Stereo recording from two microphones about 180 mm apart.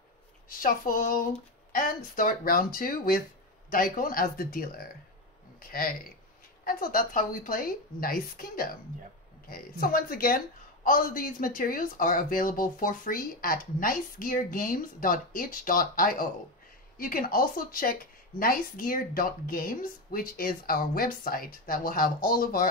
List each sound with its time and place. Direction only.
0.5 s speech: 50° left (ahead or behind)